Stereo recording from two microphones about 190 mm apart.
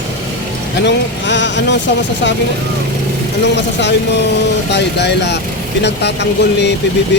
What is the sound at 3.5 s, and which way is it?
Speech, 65° left (ahead or behind).